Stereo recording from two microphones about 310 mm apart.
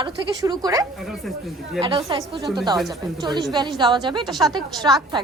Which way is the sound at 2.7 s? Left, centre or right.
Centre.